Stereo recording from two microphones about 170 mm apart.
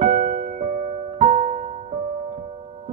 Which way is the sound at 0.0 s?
50° right (ahead or behind).